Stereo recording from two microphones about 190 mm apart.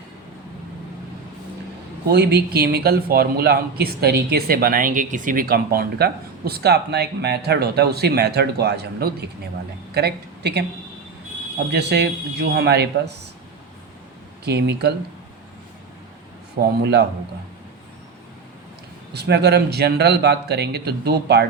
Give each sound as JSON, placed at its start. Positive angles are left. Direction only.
{"t": 2.0, "sound": "speech", "side_deg": -55}
{"t": 11.7, "sound": "speech", "side_deg": -60}
{"t": 14.4, "sound": "speech", "side_deg": -60}
{"t": 16.6, "sound": "speech", "side_deg": -60}
{"t": 19.1, "sound": "speech", "side_deg": -60}